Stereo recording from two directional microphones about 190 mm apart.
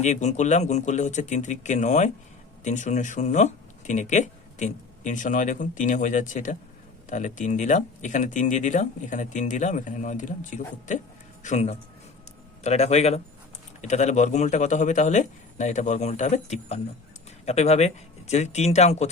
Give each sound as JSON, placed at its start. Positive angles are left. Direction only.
{"t": 0.0, "sound": "speech", "side_deg": 40}